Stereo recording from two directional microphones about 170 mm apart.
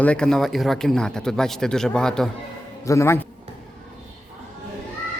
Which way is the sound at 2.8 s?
15° left (ahead or behind).